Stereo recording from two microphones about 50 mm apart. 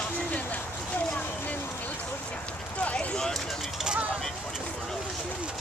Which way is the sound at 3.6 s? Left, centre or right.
Centre.